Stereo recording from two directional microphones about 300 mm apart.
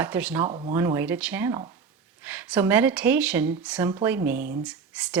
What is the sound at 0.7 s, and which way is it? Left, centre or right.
Speech, centre.